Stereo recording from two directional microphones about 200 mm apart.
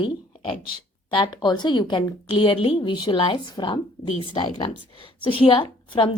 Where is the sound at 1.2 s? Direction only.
20° left (ahead or behind).